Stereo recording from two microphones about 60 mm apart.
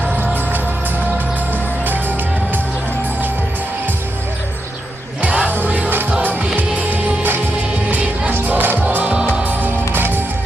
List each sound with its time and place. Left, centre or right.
1.8 s music: right
5.2 s music: right
9.1 s music: centre
9.4 s music: right